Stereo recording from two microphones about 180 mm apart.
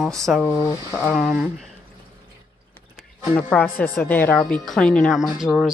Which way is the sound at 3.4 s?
5° left (ahead or behind).